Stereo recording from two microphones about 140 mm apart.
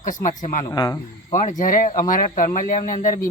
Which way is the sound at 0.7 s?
25° left (ahead or behind).